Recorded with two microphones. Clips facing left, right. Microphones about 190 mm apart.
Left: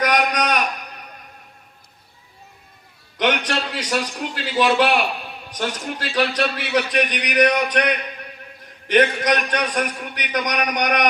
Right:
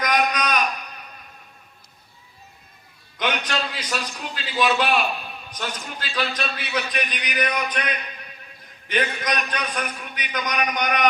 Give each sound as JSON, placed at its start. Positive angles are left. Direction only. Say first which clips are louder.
{"t": 3.2, "sound": "a man's voice", "louder": "left 4 dB", "side_deg": 75}